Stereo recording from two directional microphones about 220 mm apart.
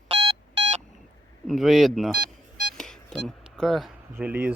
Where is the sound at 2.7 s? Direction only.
5° left (ahead or behind).